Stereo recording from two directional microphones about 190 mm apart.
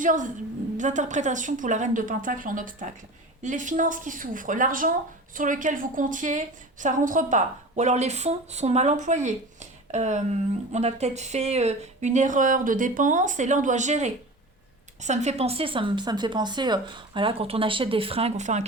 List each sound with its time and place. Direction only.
0.0 s a woman's voice: 45° right (ahead or behind)